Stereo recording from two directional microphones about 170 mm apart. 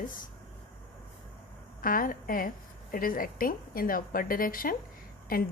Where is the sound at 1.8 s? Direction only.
55° left (ahead or behind).